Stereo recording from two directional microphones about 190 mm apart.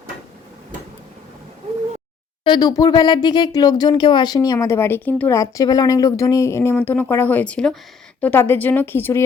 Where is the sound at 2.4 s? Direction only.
20° left (ahead or behind).